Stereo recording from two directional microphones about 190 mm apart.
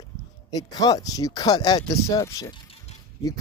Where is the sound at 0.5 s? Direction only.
20° left (ahead or behind).